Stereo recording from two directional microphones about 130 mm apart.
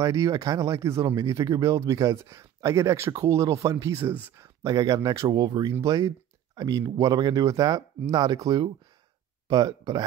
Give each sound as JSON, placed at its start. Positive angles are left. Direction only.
{"t": 0.0, "sound": "speech", "side_deg": -25}